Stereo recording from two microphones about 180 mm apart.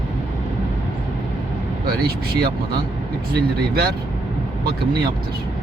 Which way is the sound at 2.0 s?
60° right (ahead or behind).